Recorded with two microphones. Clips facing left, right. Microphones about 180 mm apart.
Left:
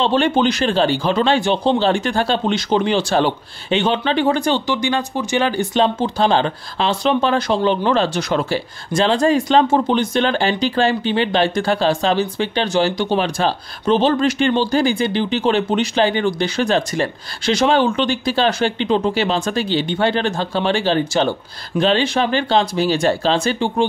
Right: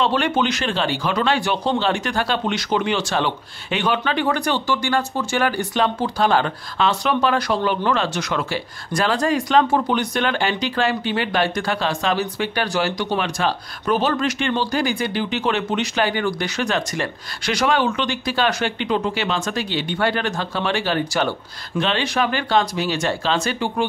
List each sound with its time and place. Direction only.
0.0 s speech: 30° left (ahead or behind)